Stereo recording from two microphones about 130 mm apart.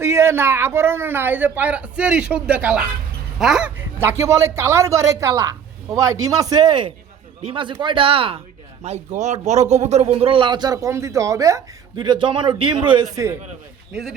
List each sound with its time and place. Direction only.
0.0 s speech: 20° right (ahead or behind); by 3.7 s 5° right (ahead or behind)
4.0 s speech: 20° right (ahead or behind); by 8.4 s 45° right (ahead or behind)
8.8 s a man's voice: 60° right (ahead or behind); by 11.6 s 25° right (ahead or behind)
11.9 s speech: 35° right (ahead or behind)